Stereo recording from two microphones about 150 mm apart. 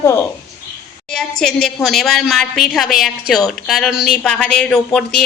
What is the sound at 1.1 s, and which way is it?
A woman's voice, 5° left (ahead or behind).